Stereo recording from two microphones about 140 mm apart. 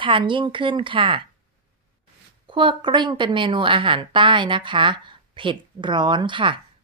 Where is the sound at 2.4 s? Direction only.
35° right (ahead or behind).